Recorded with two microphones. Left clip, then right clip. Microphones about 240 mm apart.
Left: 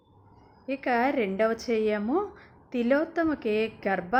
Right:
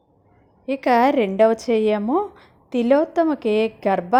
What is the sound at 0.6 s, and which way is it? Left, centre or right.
A woman's voice, right.